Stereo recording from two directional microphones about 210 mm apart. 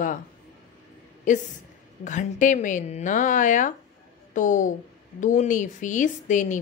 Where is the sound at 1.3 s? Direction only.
35° left (ahead or behind).